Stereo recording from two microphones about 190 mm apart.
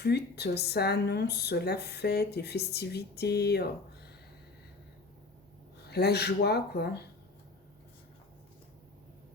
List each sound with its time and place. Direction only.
0.0 s speech: 60° left (ahead or behind)
5.9 s speech: 60° left (ahead or behind)